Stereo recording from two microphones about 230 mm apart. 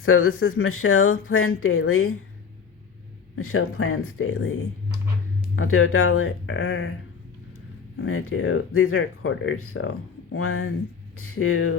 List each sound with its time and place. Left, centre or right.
0.0 s speech: left
3.3 s speech: left
5.5 s speech: left
7.9 s speech: left